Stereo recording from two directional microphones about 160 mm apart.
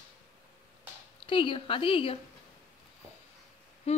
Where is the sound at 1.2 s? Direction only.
35° left (ahead or behind).